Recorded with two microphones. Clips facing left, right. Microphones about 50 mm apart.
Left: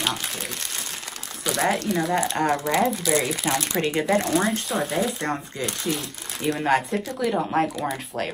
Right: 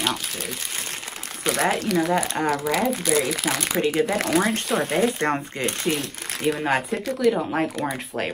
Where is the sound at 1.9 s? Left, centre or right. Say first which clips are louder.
Right 2 dB; right.